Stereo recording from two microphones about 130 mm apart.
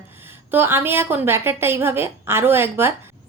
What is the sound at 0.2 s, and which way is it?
A woman's voice, 15° right (ahead or behind).